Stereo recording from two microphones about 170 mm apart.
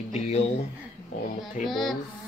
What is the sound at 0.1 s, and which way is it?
Speech, 35° left (ahead or behind).